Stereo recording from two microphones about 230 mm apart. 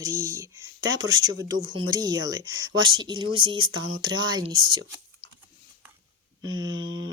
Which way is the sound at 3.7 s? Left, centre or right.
Right.